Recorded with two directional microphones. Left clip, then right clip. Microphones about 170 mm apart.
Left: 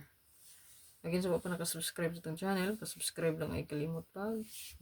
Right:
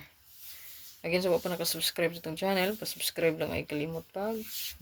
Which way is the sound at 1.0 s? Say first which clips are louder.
Right 8 dB; 40° left (ahead or behind).